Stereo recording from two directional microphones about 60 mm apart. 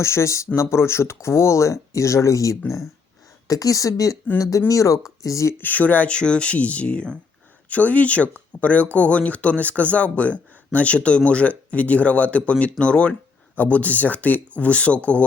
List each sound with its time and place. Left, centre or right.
0.0 s speech: left
3.4 s speech: left
5.5 s speech: left